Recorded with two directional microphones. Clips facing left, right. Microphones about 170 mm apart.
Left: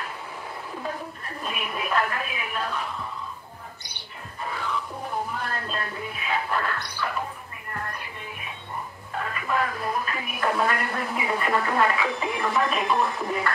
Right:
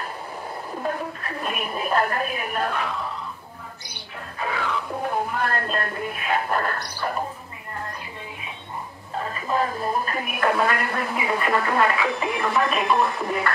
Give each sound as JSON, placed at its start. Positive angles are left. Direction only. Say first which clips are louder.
{"t": 0.8, "sound": "a woman's voice", "louder": "right 7 dB", "side_deg": -65}
{"t": 1.6, "sound": "a woman's voice", "louder": "right 3 dB", "side_deg": -35}
{"t": 4.4, "sound": "music", "louder": "right 4 dB", "side_deg": -80}
{"t": 9.1, "sound": "music", "louder": "right 2 dB", "side_deg": -30}
{"t": 10.1, "sound": "speech", "louder": "right 4 dB", "side_deg": -60}